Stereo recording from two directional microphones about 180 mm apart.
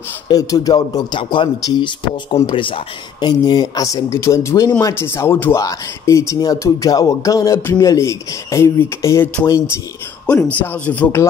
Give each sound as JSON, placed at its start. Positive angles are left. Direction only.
{"t": 0.3, "sound": "speech", "side_deg": 20}